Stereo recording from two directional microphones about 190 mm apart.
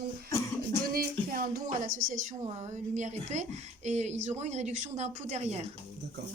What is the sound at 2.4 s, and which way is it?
A woman's voice, 35° right (ahead or behind).